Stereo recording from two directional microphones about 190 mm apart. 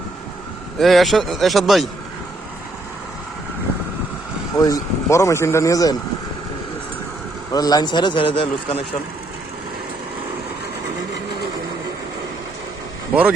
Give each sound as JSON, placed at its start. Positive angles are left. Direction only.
{"t": 0.8, "sound": "a man's voice", "side_deg": 0}
{"t": 4.5, "sound": "speech", "side_deg": 20}
{"t": 7.5, "sound": "a man's voice", "side_deg": 20}
{"t": 13.1, "sound": "speech", "side_deg": -5}